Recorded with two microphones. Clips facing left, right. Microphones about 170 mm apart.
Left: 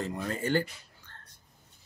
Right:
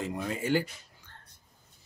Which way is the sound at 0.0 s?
10° right (ahead or behind).